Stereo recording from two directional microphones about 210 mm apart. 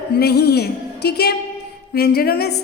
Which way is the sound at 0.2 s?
50° left (ahead or behind).